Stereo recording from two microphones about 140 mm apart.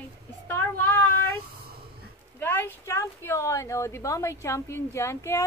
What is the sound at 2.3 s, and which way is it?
A woman's voice, 15° left (ahead or behind).